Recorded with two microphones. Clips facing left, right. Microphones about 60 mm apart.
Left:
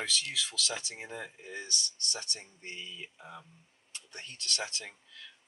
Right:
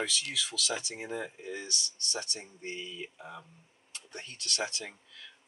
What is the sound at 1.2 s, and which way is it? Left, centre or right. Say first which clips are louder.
Speech: right 3 dB; centre.